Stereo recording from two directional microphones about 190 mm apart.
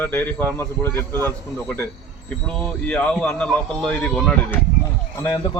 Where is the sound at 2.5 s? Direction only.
5° left (ahead or behind).